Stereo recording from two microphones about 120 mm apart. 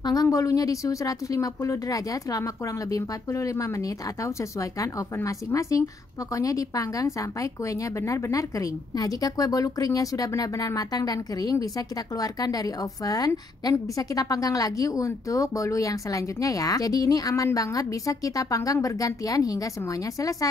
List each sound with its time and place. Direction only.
0.0 s speech: 30° left (ahead or behind)